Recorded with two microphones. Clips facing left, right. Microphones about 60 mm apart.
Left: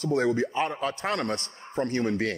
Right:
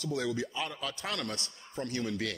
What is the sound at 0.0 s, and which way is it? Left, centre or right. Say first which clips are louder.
A man's voice: left 9 dB; left.